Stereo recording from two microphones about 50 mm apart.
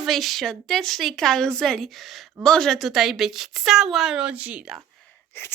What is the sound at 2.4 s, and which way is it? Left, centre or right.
A woman's voice, centre.